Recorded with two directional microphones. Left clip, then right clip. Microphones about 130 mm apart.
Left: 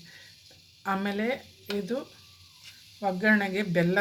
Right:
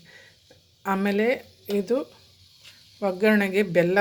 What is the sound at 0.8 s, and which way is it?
Speech, 40° right (ahead or behind).